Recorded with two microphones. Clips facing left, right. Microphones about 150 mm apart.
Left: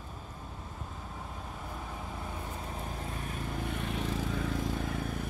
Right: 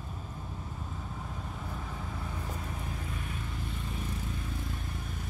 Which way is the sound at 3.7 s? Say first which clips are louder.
Left 6 dB; 75° left (ahead or behind).